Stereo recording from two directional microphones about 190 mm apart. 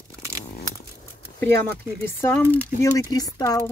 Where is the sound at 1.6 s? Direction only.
10° left (ahead or behind).